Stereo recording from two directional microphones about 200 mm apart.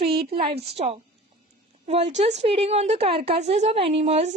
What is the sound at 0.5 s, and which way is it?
Speech, 55° right (ahead or behind).